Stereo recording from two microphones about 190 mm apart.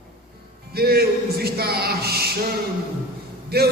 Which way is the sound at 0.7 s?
55° right (ahead or behind).